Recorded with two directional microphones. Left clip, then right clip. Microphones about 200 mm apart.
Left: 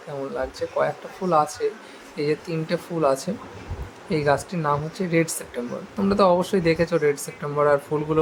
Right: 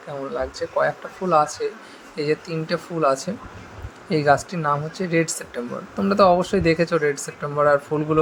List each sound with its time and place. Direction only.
0.3 s speech: 15° right (ahead or behind)